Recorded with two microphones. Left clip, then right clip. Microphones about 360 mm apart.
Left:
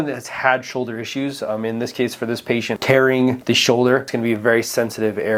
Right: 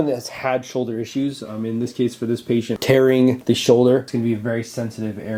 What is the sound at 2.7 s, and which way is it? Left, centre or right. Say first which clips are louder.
Speech: even; centre.